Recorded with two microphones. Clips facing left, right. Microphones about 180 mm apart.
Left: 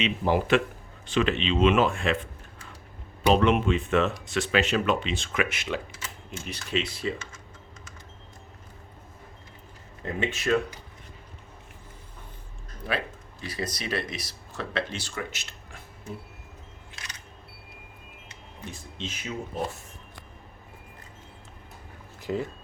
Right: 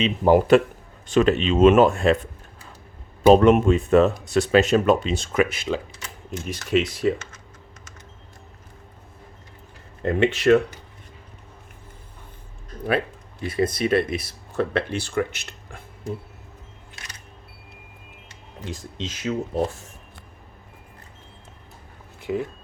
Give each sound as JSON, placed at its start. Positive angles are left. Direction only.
{"t": 0.0, "sound": "speech", "side_deg": -40}
{"t": 6.4, "sound": "speech", "side_deg": -45}
{"t": 10.0, "sound": "speech", "side_deg": -70}
{"t": 13.4, "sound": "speech", "side_deg": -55}
{"t": 18.6, "sound": "speech", "side_deg": -90}
{"t": 22.3, "sound": "speech", "side_deg": -5}